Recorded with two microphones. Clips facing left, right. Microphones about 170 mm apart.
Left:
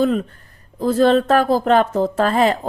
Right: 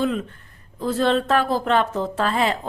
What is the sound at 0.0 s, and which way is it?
A woman's voice, 40° left (ahead or behind).